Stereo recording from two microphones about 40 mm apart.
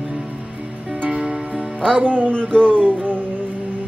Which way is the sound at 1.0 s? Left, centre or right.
Right.